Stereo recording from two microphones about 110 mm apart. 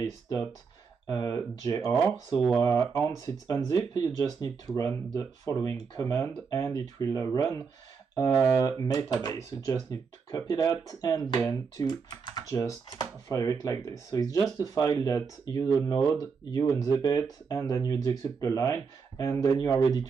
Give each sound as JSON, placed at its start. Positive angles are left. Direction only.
{"t": 0.0, "sound": "speech", "side_deg": 35}
{"t": 3.7, "sound": "speech", "side_deg": 35}